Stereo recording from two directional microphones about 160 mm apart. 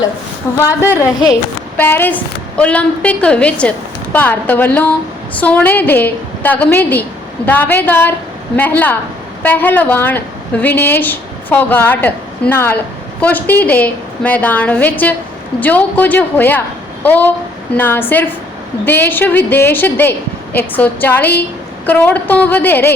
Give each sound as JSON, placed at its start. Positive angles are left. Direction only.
{"t": 0.6, "sound": "a woman's voice", "side_deg": 15}